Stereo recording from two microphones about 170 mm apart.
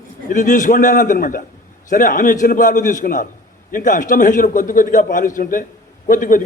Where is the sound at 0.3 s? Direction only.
50° left (ahead or behind).